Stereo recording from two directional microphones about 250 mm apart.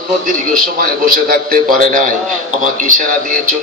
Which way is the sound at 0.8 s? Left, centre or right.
Right.